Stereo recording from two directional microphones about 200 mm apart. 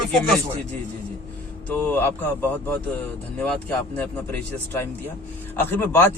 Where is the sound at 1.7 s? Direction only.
10° left (ahead or behind).